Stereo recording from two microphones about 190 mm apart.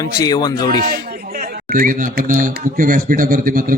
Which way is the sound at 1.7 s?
45° right (ahead or behind).